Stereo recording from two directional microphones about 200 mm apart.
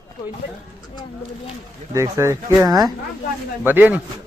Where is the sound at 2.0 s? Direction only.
15° right (ahead or behind).